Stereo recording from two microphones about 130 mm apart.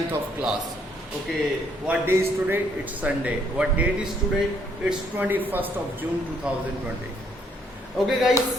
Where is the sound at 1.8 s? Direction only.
10° right (ahead or behind).